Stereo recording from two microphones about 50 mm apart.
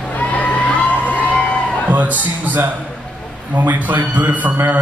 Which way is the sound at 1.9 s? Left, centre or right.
Right.